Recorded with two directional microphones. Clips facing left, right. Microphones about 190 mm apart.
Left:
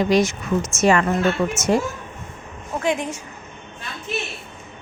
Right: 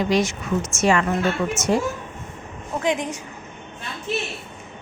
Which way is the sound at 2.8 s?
15° right (ahead or behind).